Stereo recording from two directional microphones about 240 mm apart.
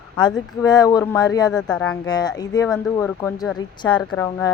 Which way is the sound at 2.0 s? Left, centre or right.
Centre.